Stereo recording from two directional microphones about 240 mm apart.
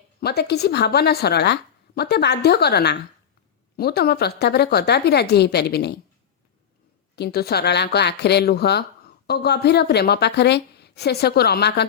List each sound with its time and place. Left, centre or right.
0.2 s speech: left
7.2 s speech: left